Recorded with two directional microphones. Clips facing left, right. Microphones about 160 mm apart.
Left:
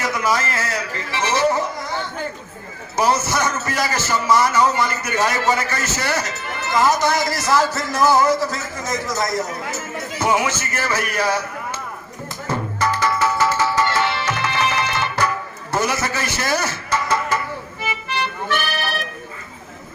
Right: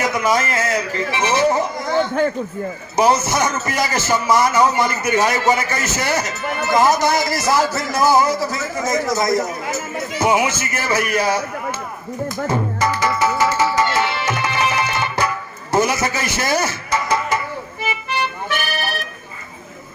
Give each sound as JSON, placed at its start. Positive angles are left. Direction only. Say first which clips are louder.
{"t": 0.0, "sound": "a man's voice", "louder": "right 3 dB", "side_deg": -20}
{"t": 2.9, "sound": "a man's voice", "louder": "right 3 dB", "side_deg": -15}
{"t": 12.5, "sound": "music", "louder": "even", "side_deg": -15}
{"t": 15.7, "sound": "a man's voice", "louder": "right 4 dB", "side_deg": -15}
{"t": 17.8, "sound": "music", "louder": "right 2 dB", "side_deg": -15}